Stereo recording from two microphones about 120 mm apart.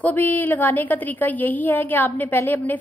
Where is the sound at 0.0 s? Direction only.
15° left (ahead or behind).